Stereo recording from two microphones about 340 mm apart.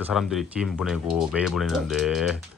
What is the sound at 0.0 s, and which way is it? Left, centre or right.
Speech, centre.